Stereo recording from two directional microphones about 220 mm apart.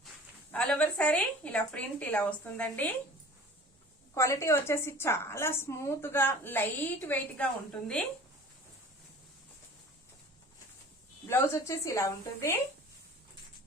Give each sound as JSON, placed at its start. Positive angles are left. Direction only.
{"t": 0.5, "sound": "a woman's voice", "side_deg": 5}
{"t": 4.1, "sound": "a woman's voice", "side_deg": 15}
{"t": 11.3, "sound": "a woman's voice", "side_deg": 10}